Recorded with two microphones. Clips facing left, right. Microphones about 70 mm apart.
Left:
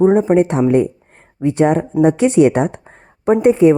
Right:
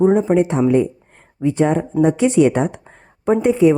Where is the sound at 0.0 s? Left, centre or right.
Left.